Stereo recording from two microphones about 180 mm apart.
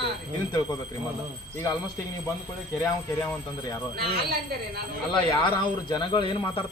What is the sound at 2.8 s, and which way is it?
Speech, 10° left (ahead or behind).